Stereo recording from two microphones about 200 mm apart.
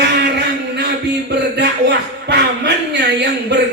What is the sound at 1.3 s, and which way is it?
Speech, 55° right (ahead or behind).